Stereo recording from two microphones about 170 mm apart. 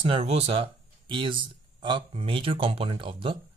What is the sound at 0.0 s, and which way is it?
Speech, 30° right (ahead or behind).